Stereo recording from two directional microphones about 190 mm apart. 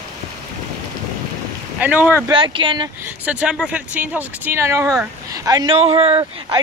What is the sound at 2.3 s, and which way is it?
Speech, 25° right (ahead or behind).